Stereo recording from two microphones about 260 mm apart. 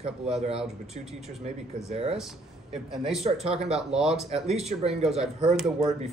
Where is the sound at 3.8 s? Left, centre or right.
Centre.